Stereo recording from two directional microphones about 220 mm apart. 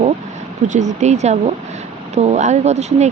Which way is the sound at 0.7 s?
35° right (ahead or behind).